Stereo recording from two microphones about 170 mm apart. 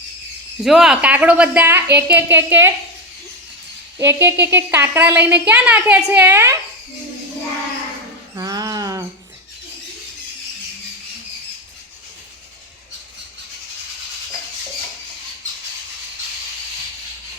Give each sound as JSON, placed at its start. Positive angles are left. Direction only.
{"t": 0.6, "sound": "a woman's voice", "side_deg": -5}
{"t": 3.9, "sound": "a woman's voice", "side_deg": -15}
{"t": 8.4, "sound": "a sound", "side_deg": -20}